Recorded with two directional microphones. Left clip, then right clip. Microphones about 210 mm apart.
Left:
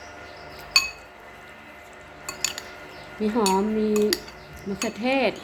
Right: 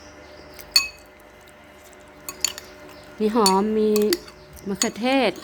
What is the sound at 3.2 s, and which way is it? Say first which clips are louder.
Speech: right 4 dB; 30° right (ahead or behind).